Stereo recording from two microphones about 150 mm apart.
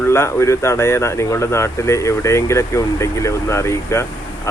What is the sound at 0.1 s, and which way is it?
Speech, 20° left (ahead or behind).